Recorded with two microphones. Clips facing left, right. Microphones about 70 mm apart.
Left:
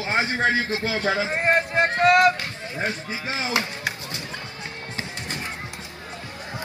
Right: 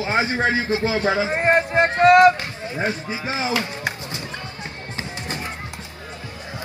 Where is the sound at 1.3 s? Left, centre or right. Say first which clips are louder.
Right 4 dB; right.